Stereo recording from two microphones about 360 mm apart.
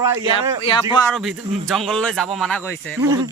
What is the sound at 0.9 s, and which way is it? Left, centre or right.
A man's voice, centre.